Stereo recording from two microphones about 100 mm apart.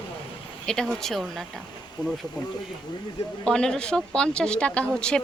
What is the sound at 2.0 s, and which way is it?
Speech, 45° left (ahead or behind).